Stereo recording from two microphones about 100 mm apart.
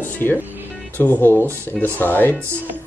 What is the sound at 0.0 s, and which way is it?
Music, 20° left (ahead or behind).